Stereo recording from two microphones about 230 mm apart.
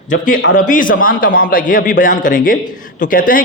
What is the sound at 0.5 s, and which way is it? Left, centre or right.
A man's voice, left.